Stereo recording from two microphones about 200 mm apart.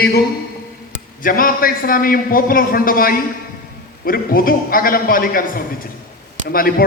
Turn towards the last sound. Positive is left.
turn(degrees=45)  # may be behind; listen again after turning